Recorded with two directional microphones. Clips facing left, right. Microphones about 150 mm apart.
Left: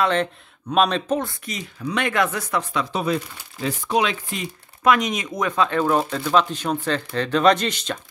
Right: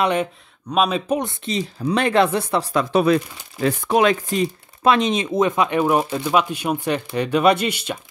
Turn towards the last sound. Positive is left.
turn(degrees=-10)  # may be behind; listen again after turning